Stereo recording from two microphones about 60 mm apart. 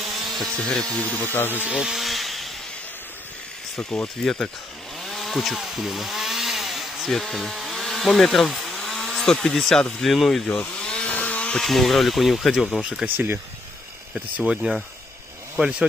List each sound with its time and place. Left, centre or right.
0.0 s tools: centre
0.7 s speech: centre
1.2 s speech: left
1.7 s speech: centre
2.0 s chainsaw: centre
3.7 s speech: centre
5.0 s chainsaw: centre
10.0 s speech: centre
10.4 s chainsaw: centre
11.6 s speech: centre
13.0 s speech: right
14.4 s speech: centre